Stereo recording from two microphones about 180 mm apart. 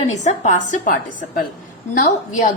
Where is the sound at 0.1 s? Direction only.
40° left (ahead or behind).